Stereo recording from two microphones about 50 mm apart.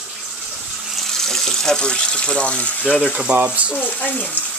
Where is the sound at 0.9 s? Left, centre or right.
Centre; by 3.1 s left.